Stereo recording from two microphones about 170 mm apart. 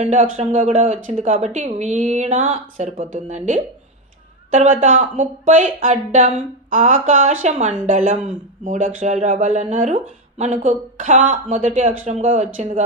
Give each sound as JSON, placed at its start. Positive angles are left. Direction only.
{"t": 0.0, "sound": "speech", "side_deg": -45}